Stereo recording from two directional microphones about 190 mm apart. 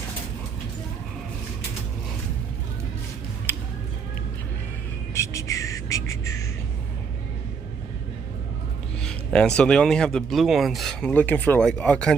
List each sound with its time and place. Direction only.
3.5 s music: 10° left (ahead or behind)
5.1 s music: 15° left (ahead or behind)
9.0 s speech: 5° left (ahead or behind)